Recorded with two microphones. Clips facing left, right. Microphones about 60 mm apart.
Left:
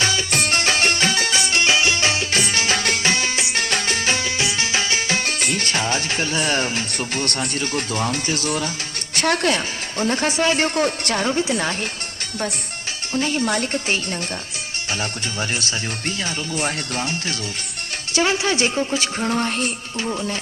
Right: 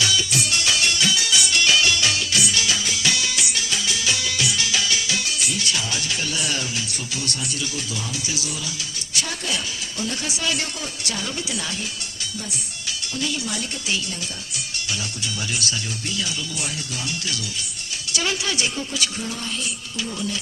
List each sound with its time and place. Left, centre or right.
0.0 s music: left
3.6 s music: left
9.1 s speech: left
10.0 s a woman's voice: left
13.1 s speech: left
15.4 s speech: left
19.2 s a woman's voice: left